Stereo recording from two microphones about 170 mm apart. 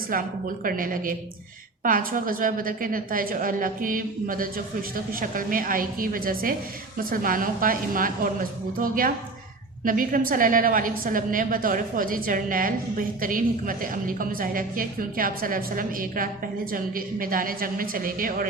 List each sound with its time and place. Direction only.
0.1 s a woman's voice: 55° right (ahead or behind)